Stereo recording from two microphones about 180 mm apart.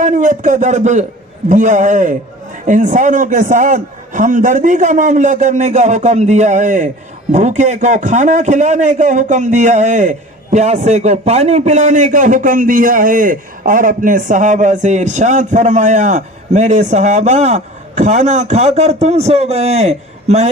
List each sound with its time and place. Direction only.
0.0 s a man's voice: 45° right (ahead or behind)